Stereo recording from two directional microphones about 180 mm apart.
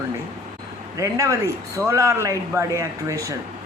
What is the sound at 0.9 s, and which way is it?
Speech, 20° right (ahead or behind).